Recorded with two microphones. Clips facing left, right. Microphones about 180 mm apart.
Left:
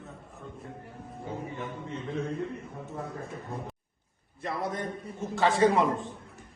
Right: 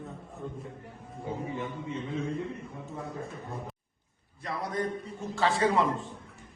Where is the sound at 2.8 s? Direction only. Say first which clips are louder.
Even; centre (ahead or behind).